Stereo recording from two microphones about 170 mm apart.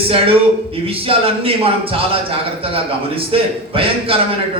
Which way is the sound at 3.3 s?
35° right (ahead or behind).